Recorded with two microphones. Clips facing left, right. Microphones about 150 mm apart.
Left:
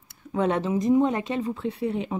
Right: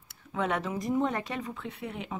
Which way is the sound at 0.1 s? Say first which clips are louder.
Left 6 dB; 35° left (ahead or behind).